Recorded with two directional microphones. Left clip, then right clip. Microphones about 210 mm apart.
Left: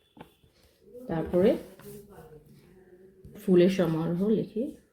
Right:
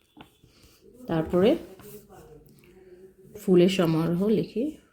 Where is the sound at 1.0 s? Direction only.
60° right (ahead or behind).